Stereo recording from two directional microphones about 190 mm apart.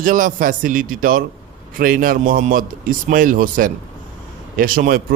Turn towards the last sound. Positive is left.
turn(degrees=-45)  # may be behind; listen again after turning